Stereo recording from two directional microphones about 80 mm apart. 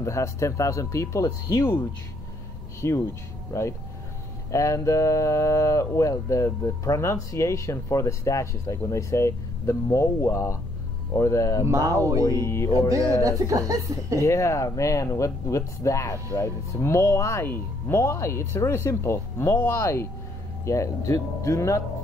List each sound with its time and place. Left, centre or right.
0.0 s speech: left
2.8 s speech: left
11.6 s speech: right
12.4 s speech: left
13.2 s speech: right
14.2 s speech: left